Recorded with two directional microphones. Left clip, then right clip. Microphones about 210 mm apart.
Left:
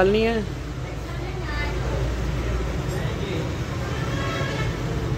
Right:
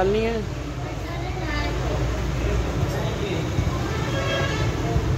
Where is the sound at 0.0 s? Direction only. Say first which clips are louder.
Left 2 dB; 20° left (ahead or behind).